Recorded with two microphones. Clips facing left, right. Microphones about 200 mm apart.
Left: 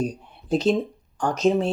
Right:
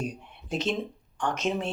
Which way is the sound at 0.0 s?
35° left (ahead or behind).